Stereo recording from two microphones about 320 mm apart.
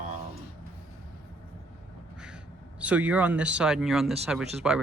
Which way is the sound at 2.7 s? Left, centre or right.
Centre.